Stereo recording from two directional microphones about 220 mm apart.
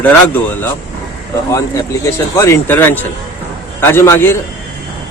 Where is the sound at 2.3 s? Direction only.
10° left (ahead or behind).